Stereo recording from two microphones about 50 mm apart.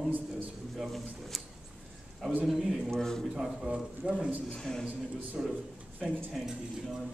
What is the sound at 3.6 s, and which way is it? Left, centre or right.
Speech, centre.